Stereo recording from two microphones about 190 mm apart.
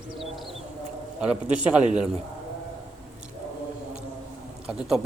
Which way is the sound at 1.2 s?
5° right (ahead or behind).